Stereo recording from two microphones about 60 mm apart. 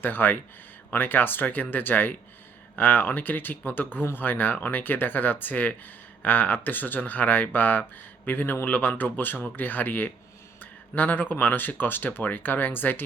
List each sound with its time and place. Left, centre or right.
0.0 s speech: left